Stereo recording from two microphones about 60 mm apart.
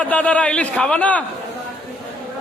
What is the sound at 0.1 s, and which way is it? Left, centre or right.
A man's voice, left.